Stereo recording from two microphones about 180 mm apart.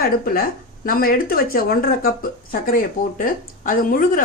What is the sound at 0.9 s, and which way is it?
Speech, 50° left (ahead or behind).